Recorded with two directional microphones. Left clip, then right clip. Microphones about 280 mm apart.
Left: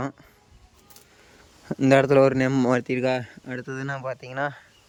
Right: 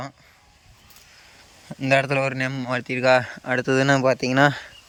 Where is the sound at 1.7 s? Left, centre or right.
Centre.